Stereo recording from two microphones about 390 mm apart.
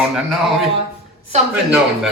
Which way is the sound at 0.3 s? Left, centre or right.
Centre.